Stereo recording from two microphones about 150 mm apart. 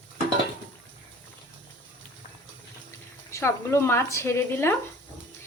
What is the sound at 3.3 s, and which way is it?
A woman's voice, 20° left (ahead or behind).